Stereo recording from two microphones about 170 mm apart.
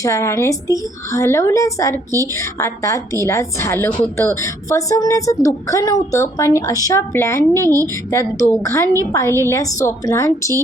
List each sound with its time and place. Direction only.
0.0 s a woman's voice: 15° left (ahead or behind)